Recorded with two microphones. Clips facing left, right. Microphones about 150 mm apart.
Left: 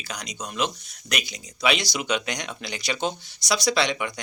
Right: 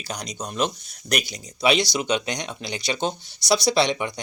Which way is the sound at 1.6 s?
30° right (ahead or behind).